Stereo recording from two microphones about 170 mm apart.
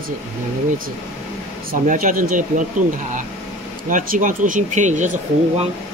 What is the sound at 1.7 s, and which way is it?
Speech, 50° right (ahead or behind).